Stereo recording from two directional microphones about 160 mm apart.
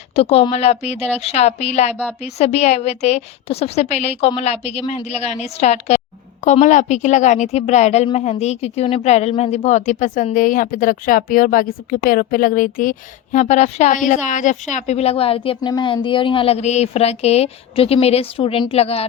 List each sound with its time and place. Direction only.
0.2 s a woman's voice: 40° left (ahead or behind)